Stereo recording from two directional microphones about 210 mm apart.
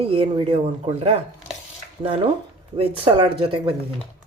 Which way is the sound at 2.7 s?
25° right (ahead or behind).